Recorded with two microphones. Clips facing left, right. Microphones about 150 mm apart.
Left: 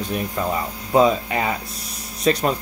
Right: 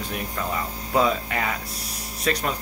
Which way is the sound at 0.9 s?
25° left (ahead or behind).